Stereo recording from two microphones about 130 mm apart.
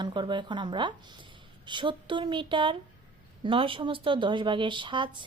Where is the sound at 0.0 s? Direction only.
35° right (ahead or behind).